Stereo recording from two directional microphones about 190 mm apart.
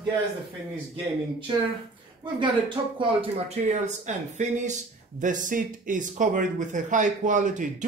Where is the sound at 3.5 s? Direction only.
40° right (ahead or behind).